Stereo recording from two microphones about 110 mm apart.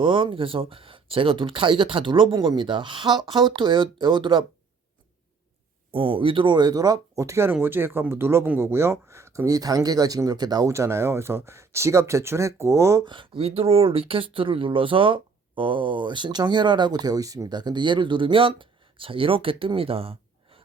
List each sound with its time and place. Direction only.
0.0 s speech: 50° right (ahead or behind)
5.9 s speech: 50° right (ahead or behind)
10.7 s speech: 25° right (ahead or behind)
13.1 s speech: 50° right (ahead or behind)